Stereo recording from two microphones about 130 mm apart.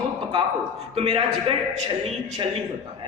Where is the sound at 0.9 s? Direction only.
50° right (ahead or behind).